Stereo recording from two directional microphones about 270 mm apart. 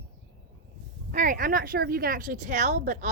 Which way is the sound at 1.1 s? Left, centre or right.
Right.